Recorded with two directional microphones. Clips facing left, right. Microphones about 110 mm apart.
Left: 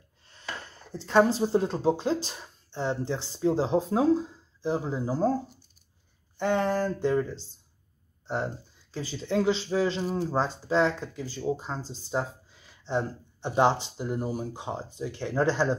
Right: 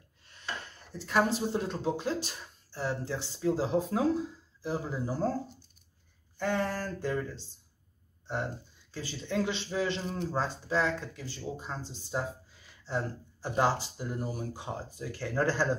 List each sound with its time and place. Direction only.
0.2 s a sound: 30° left (ahead or behind)
0.9 s speech: 30° left (ahead or behind)
6.3 s speech: 25° left (ahead or behind)
8.9 s speech: 30° left (ahead or behind)